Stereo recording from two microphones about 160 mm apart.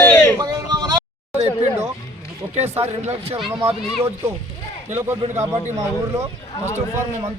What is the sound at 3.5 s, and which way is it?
Speech, 40° right (ahead or behind).